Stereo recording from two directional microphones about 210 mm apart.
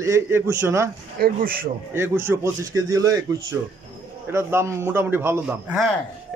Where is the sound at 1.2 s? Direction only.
45° right (ahead or behind).